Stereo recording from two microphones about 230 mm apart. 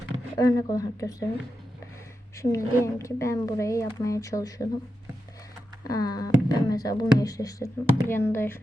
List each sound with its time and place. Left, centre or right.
0.3 s speech: centre
2.3 s speech: centre
5.8 s speech: centre